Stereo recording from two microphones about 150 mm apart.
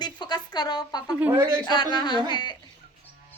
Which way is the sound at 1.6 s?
30° left (ahead or behind).